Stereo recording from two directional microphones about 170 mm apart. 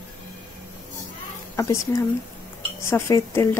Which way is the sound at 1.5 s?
15° left (ahead or behind).